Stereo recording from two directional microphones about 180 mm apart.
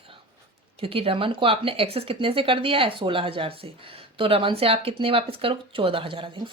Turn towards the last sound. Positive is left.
turn(degrees=-25)  # may be behind; listen again after turning